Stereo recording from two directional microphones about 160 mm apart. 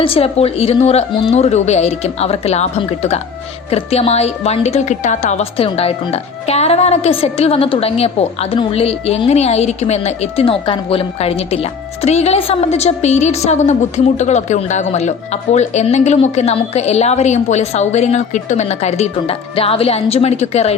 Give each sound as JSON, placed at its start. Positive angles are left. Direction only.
{"t": 0.0, "sound": "a woman's voice", "side_deg": 35}